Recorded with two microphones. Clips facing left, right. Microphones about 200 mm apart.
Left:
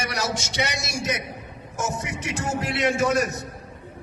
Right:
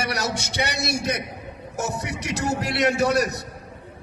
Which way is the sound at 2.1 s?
70° right (ahead or behind).